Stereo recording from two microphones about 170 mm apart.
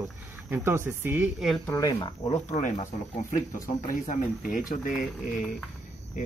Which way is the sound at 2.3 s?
45° left (ahead or behind).